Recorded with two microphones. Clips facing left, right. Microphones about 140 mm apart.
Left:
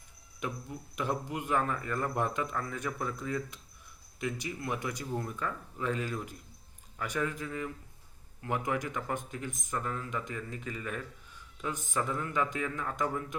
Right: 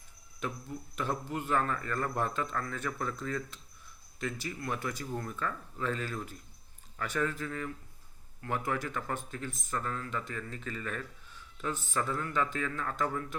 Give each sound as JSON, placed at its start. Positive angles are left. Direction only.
{"t": 0.3, "sound": "speech", "side_deg": 15}